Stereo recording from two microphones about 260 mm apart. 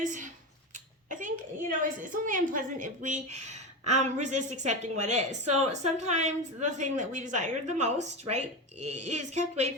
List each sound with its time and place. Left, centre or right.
0.0 s speech: right
1.8 s a woman's voice: right